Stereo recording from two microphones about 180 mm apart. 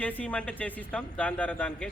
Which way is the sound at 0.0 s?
10° left (ahead or behind).